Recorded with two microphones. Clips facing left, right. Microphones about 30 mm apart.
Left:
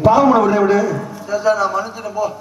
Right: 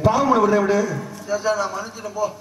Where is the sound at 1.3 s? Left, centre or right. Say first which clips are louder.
Left 6 dB; left.